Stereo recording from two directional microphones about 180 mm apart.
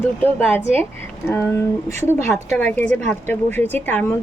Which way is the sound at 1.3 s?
15° left (ahead or behind).